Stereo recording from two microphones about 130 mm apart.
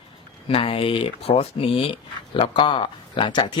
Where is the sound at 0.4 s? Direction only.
45° left (ahead or behind).